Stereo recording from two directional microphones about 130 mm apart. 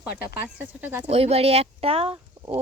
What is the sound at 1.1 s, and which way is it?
Speech, 50° right (ahead or behind).